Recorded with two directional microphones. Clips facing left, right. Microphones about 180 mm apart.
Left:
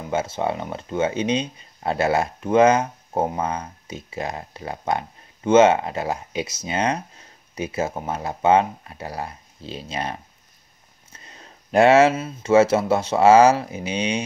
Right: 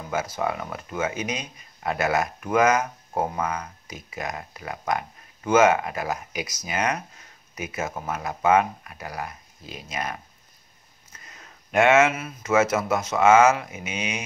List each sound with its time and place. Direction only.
0.1 s speech: 25° left (ahead or behind)